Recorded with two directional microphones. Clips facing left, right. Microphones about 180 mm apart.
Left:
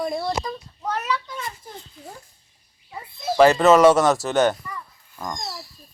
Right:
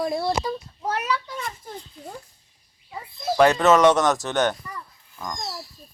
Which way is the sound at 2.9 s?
5° left (ahead or behind).